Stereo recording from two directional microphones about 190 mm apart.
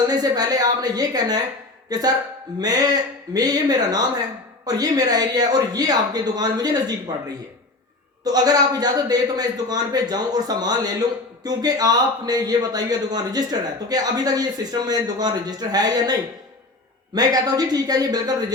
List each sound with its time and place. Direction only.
0.1 s speech: 20° right (ahead or behind)
8.2 s speech: 20° right (ahead or behind)
17.2 s speech: 20° right (ahead or behind)